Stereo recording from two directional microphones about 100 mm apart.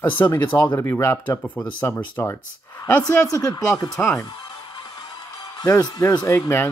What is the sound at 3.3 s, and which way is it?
Speech, 35° left (ahead or behind).